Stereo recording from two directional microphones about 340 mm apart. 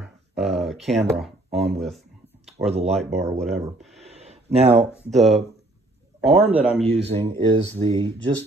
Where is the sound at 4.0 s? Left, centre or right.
Centre.